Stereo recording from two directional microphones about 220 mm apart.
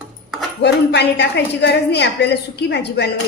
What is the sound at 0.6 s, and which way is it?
A woman's voice, 50° left (ahead or behind).